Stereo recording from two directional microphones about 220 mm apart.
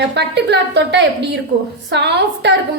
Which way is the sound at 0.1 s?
50° right (ahead or behind).